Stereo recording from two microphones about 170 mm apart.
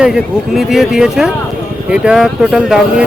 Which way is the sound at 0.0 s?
Centre (ahead or behind).